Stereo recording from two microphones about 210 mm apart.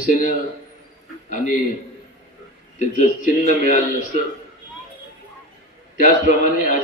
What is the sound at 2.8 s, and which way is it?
A man's voice, 35° left (ahead or behind).